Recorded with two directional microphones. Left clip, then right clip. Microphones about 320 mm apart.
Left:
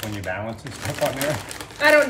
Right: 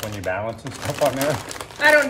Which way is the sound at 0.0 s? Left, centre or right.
Centre.